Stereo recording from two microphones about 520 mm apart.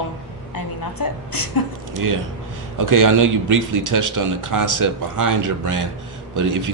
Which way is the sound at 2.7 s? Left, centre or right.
Right.